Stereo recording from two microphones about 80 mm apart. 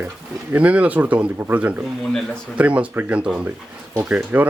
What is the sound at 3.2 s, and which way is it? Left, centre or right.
Speech, centre.